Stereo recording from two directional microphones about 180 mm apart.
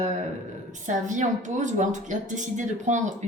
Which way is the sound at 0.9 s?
45° right (ahead or behind).